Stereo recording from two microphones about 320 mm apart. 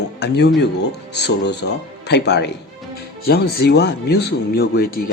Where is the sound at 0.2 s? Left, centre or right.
Left.